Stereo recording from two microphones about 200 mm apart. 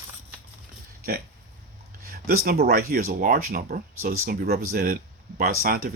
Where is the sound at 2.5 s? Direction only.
50° right (ahead or behind).